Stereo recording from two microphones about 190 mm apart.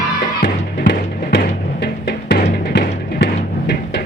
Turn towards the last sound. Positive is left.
turn(degrees=60)  # may be behind; listen again after turning